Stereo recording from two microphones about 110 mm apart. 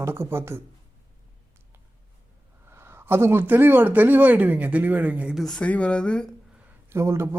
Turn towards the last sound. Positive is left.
turn(degrees=-25)  # may be behind; listen again after turning